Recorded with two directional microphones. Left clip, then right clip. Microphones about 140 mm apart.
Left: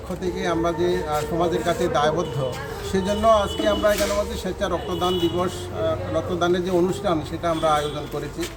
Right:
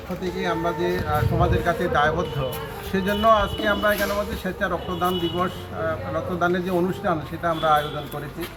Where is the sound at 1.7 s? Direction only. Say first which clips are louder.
Right 1 dB; 25° left (ahead or behind).